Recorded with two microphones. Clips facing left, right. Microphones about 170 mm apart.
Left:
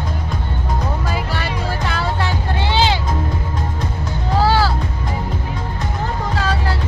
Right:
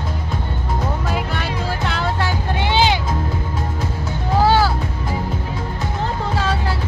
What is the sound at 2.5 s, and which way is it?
Music, 15° right (ahead or behind).